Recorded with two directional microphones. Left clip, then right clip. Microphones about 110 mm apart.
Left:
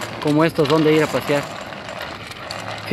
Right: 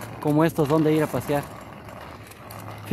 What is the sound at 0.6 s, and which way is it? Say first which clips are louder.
Speech: left 5 dB; 10° left (ahead or behind).